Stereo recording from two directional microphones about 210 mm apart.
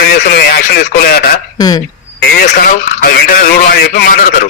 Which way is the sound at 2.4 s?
45° left (ahead or behind).